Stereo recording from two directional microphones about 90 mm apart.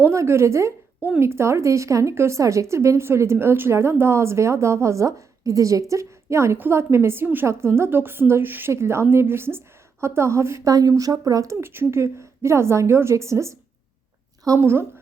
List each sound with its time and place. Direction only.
0.1 s a woman's voice: 30° right (ahead or behind)
11.6 s a woman's voice: 25° right (ahead or behind)
14.6 s a woman's voice: 25° right (ahead or behind)